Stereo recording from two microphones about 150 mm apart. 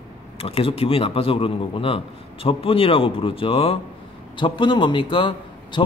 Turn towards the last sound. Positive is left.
turn(degrees=35)  # may be behind; listen again after turning